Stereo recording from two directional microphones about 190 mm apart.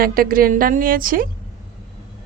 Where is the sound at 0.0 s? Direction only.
50° right (ahead or behind).